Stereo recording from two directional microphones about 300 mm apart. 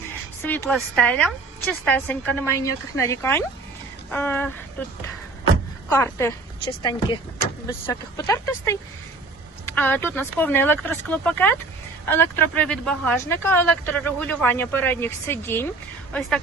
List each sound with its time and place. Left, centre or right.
0.4 s a woman's voice: centre
5.9 s speech: centre